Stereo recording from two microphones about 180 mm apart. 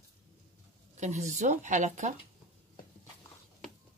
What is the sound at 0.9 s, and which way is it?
Speech, 40° right (ahead or behind).